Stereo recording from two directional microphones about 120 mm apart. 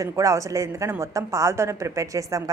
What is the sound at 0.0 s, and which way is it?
A woman's voice, 25° right (ahead or behind).